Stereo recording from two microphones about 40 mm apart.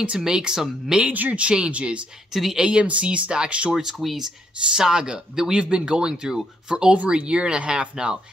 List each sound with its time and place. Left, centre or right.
0.2 s speech: centre
1.0 s speech: right
1.4 s speech: right
4.0 s speech: centre
4.7 s speech: centre